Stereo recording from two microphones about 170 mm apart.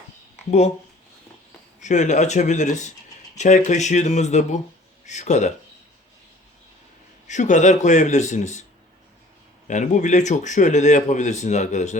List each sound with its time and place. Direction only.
1.8 s a man's voice: 45° left (ahead or behind)
7.3 s a man's voice: 45° left (ahead or behind)
9.6 s a man's voice: 45° left (ahead or behind)